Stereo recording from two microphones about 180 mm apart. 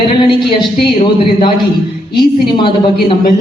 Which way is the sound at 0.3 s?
25° left (ahead or behind).